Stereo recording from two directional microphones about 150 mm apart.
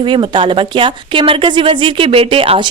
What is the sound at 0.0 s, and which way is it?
Speech, 35° right (ahead or behind).